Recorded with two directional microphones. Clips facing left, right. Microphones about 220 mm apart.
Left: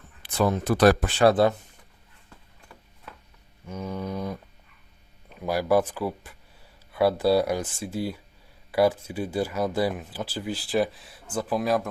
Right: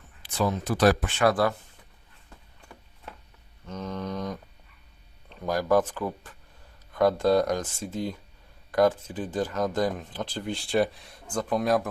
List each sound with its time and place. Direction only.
0.2 s speech: 60° left (ahead or behind)
1.0 s speech: 30° left (ahead or behind)
3.7 s mantra: 10° left (ahead or behind)
5.3 s speech: 10° left (ahead or behind)